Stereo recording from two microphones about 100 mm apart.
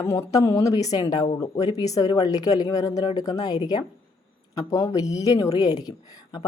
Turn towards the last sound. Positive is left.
turn(degrees=40)  # may be behind; listen again after turning